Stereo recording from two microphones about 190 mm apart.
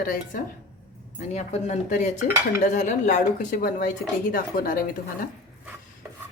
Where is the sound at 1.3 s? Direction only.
35° left (ahead or behind).